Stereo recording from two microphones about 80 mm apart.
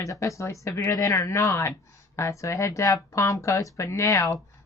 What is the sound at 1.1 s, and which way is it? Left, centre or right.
A woman's voice, left.